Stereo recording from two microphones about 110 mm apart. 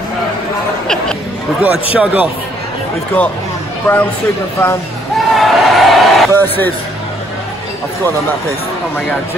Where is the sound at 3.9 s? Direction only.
20° left (ahead or behind).